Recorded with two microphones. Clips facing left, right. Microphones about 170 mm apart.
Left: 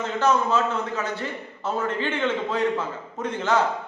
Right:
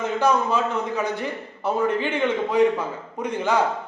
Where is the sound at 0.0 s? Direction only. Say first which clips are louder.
Right 1 dB; 15° right (ahead or behind).